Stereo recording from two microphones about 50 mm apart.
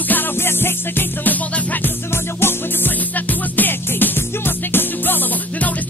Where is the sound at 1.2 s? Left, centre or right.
Left.